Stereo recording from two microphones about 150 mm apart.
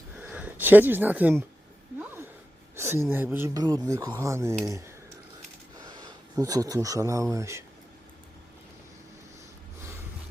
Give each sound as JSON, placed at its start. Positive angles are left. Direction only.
{"t": 0.2, "sound": "a sound", "side_deg": -10}
{"t": 2.7, "sound": "speech", "side_deg": -15}
{"t": 5.8, "sound": "speech", "side_deg": -25}